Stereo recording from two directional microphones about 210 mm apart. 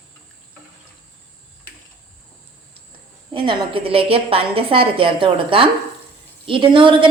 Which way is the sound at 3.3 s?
25° right (ahead or behind).